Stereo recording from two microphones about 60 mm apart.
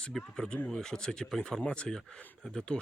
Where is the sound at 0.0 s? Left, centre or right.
Centre.